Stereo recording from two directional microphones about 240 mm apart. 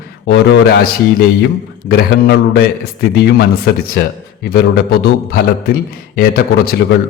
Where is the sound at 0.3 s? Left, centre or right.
Left.